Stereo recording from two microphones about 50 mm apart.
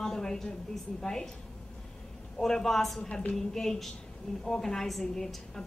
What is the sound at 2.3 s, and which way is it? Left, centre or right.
A woman's voice, centre.